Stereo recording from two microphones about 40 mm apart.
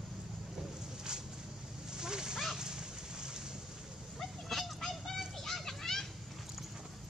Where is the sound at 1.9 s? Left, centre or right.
Centre.